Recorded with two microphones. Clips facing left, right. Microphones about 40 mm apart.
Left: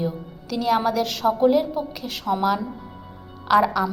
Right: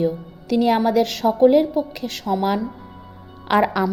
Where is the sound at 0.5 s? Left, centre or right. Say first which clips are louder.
Right 4 dB; centre.